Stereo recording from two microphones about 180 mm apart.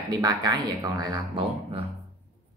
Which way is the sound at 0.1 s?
20° right (ahead or behind).